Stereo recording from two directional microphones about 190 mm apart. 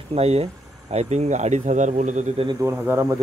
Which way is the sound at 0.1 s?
35° right (ahead or behind).